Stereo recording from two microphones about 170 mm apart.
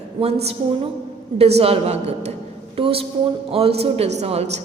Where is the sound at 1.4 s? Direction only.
35° right (ahead or behind).